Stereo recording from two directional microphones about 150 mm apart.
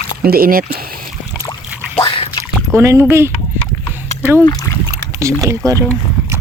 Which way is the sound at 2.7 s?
20° right (ahead or behind).